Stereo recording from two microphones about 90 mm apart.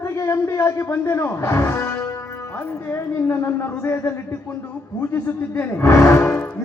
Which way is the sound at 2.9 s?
30° left (ahead or behind).